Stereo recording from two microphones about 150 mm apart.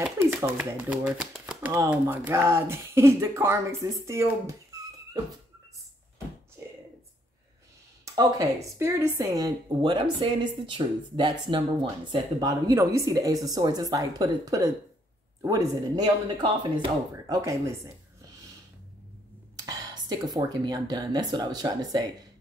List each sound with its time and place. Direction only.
0.4 s speech: 15° right (ahead or behind)
8.0 s a woman's voice: 20° right (ahead or behind)
19.6 s speech: 25° right (ahead or behind)